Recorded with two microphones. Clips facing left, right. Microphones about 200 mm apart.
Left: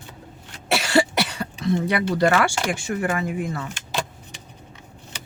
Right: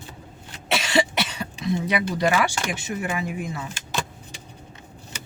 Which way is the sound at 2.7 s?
20° right (ahead or behind).